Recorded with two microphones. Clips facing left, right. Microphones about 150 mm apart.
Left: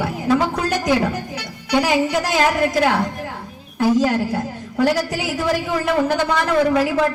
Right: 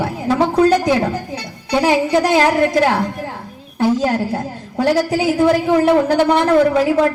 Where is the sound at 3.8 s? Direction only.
30° right (ahead or behind).